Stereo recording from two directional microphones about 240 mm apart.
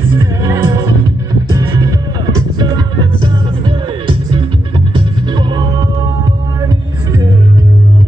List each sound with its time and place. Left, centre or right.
0.1 s music: centre